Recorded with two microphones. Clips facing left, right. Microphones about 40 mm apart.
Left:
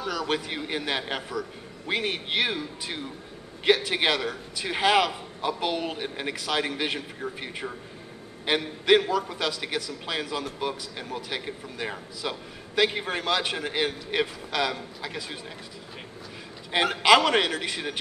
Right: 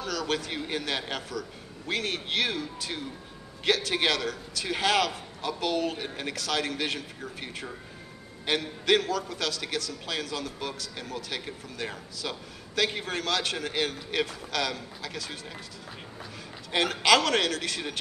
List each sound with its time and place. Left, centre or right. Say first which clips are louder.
0.0 s a man's voice: left 2 dB; centre
16.7 s a man's voice: left 3 dB; centre